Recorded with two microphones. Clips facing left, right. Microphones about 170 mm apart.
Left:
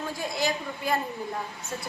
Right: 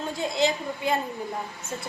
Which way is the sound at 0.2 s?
25° right (ahead or behind).